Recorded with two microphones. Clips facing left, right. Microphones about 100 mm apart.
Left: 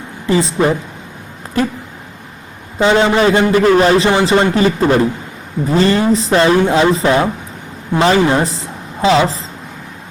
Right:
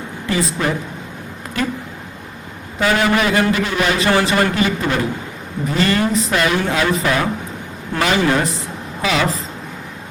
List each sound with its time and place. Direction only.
0.3 s a man's voice: 30° left (ahead or behind)
2.7 s a man's voice: 25° left (ahead or behind)
4.1 s a man's voice: 20° left (ahead or behind)